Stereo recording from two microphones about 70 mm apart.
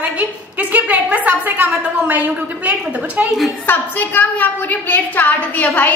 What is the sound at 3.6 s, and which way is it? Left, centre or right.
A woman's voice, left.